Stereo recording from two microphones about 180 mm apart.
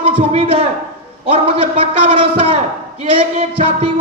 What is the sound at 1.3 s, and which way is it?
A man's voice, 30° right (ahead or behind).